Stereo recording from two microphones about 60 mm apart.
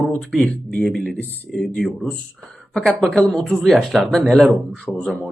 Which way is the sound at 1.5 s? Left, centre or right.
Centre.